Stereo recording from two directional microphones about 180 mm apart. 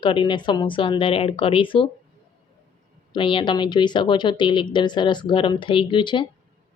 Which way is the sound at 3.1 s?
30° left (ahead or behind).